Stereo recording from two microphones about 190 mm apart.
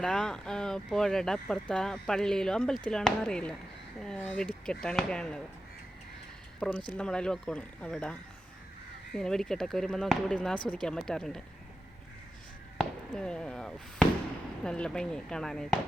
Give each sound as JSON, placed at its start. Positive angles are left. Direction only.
{"t": 0.0, "sound": "speech", "side_deg": 5}
{"t": 6.9, "sound": "speech", "side_deg": 5}
{"t": 12.7, "sound": "fireworks", "side_deg": 5}
{"t": 14.6, "sound": "speech", "side_deg": 5}